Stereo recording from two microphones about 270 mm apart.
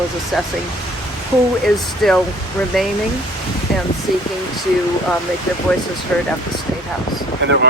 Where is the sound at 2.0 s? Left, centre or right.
Centre.